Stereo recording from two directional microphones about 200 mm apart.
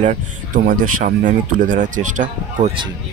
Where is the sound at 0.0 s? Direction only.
40° right (ahead or behind).